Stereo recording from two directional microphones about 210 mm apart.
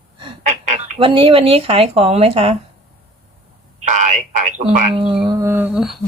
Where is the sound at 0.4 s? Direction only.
35° right (ahead or behind).